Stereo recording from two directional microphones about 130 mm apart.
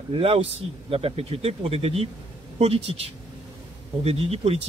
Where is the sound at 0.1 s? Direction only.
50° right (ahead or behind).